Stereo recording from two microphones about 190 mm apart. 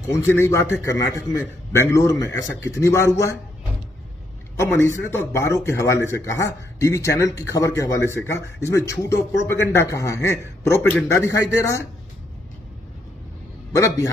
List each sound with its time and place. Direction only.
0.3 s speech: 15° left (ahead or behind)
1.8 s speech: 15° left (ahead or behind)
4.6 s speech: 15° left (ahead or behind)
13.7 s speech: 15° left (ahead or behind)